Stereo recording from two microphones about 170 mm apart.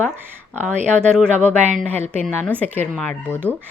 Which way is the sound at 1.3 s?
45° right (ahead or behind).